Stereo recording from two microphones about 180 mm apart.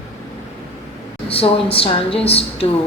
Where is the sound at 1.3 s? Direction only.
30° left (ahead or behind).